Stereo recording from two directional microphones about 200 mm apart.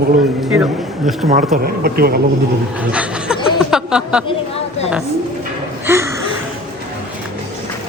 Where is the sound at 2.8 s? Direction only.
5° right (ahead or behind).